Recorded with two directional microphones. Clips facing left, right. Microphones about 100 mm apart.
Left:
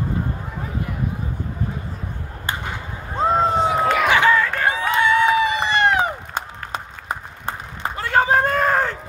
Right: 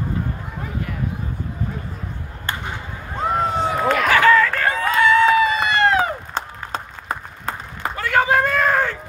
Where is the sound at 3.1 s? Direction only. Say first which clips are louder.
Left 3 dB; 30° left (ahead or behind).